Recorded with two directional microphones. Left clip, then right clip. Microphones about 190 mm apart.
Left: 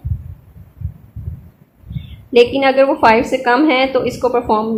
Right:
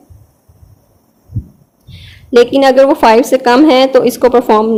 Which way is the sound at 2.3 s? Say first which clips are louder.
Right 4 dB; 45° right (ahead or behind).